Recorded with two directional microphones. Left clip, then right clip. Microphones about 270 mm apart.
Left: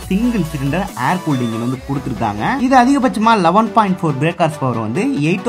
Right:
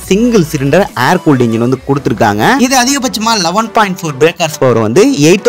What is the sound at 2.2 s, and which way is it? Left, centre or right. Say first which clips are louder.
Speech: right 8 dB; right.